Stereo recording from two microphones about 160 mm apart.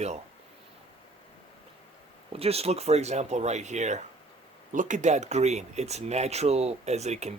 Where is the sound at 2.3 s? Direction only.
40° right (ahead or behind).